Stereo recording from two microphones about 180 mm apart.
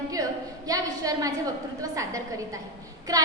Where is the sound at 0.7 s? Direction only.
20° right (ahead or behind).